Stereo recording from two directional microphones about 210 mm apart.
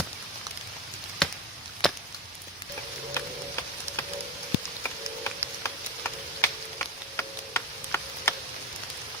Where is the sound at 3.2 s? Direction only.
10° left (ahead or behind).